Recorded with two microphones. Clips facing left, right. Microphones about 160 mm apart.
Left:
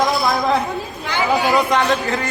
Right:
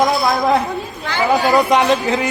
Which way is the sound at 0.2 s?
Centre (ahead or behind).